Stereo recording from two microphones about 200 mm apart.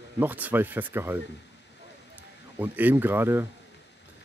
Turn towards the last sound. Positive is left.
turn(degrees=-10)  # may be behind; listen again after turning